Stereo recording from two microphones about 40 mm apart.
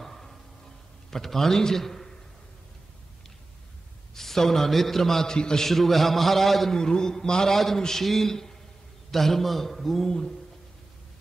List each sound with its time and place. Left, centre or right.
0.0 s a sound: centre
1.1 s a man's voice: centre
4.1 s a man's voice: centre
5.7 s a man's voice: centre
6.8 s a man's voice: centre